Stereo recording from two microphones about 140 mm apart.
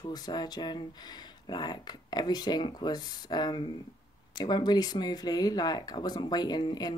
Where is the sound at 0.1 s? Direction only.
30° left (ahead or behind).